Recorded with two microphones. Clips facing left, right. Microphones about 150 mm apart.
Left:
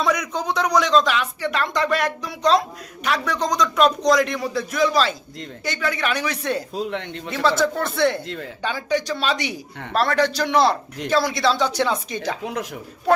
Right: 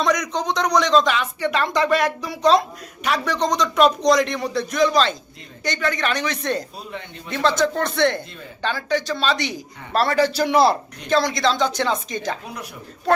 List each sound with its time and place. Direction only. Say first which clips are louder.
0.0 s speech: right 1 dB; 5° left (ahead or behind)
6.7 s speech: left 8 dB; 80° left
7.3 s speech: even; 5° left (ahead or behind)
9.9 s a man's voice: right 1 dB; 5° right (ahead or behind)
11.1 s speech: right 1 dB; 5° left (ahead or behind)